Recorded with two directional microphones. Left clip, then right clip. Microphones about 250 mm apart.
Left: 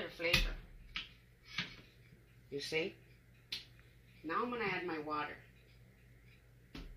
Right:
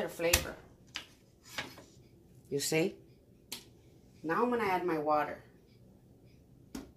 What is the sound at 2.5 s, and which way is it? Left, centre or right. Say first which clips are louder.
Speech: right 7 dB; right.